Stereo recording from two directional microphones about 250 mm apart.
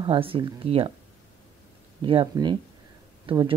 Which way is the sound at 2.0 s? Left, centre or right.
Centre.